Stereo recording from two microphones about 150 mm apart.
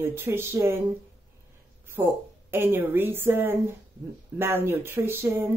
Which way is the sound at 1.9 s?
15° right (ahead or behind).